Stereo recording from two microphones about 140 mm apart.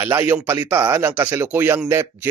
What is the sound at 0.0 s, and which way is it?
Speech, 15° right (ahead or behind).